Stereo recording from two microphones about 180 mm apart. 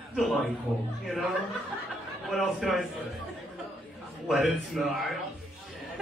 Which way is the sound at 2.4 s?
Centre (ahead or behind).